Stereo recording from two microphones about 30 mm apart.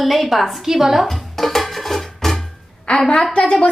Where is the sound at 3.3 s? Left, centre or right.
Left.